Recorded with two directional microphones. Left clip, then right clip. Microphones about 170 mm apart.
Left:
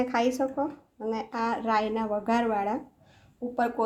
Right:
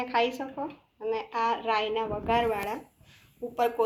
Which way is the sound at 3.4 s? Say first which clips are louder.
Left 1 dB; 35° left (ahead or behind).